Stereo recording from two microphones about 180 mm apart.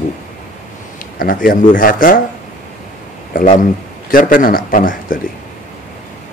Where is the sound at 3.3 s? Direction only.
45° left (ahead or behind).